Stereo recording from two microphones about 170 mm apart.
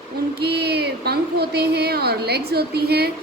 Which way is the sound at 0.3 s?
75° right (ahead or behind).